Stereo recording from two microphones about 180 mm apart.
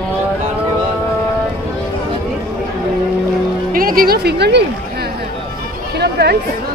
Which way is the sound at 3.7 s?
55° right (ahead or behind).